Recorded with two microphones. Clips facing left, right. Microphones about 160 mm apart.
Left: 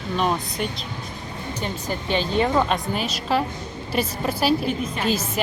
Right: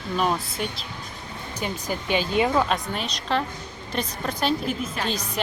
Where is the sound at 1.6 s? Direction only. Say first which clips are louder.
Even; 10° right (ahead or behind).